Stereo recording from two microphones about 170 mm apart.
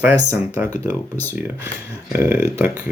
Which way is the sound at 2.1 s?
10° right (ahead or behind).